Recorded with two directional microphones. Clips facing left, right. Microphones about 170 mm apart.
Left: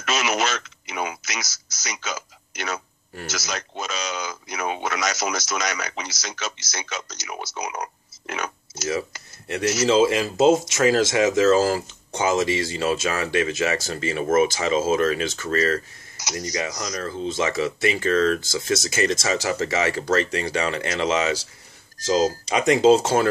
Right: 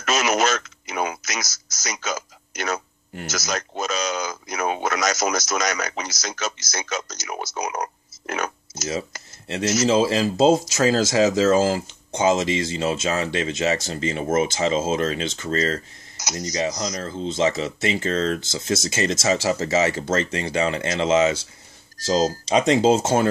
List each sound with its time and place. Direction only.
0.0 s a man's voice: 45° right (ahead or behind)
9.8 s speech: 30° right (ahead or behind)